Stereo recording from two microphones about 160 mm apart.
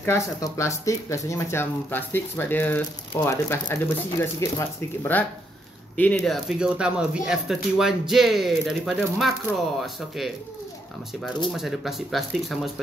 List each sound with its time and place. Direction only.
0.0 s speech: 15° left (ahead or behind); by 10.3 s centre (ahead or behind)
11.5 s speech: centre (ahead or behind)